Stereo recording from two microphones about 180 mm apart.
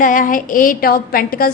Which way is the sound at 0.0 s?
50° left (ahead or behind).